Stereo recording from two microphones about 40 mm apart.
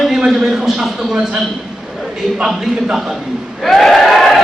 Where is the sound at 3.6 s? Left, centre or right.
Centre.